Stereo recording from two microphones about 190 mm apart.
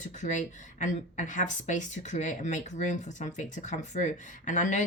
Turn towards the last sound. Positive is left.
turn(degrees=40)  # may be behind; listen again after turning